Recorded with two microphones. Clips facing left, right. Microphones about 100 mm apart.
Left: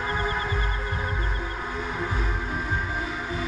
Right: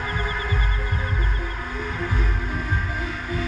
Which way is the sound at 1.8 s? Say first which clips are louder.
Right 3 dB; 15° left (ahead or behind).